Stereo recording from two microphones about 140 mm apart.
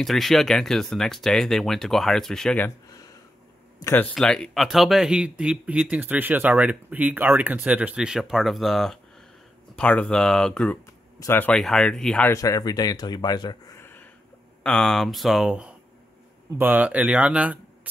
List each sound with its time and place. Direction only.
0.0 s speech: centre (ahead or behind)
3.8 s speech: 15° left (ahead or behind)
4.1 s speech: 5° left (ahead or behind)
11.5 s speech: 5° left (ahead or behind)
12.3 s a man's voice: 25° left (ahead or behind)
13.7 s a sound: 15° left (ahead or behind)
14.6 s speech: 5° left (ahead or behind)